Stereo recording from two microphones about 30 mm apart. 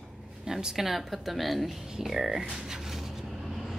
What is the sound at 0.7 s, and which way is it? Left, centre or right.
Speech, centre.